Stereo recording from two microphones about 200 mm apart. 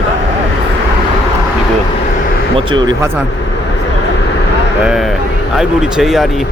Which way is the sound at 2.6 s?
25° right (ahead or behind).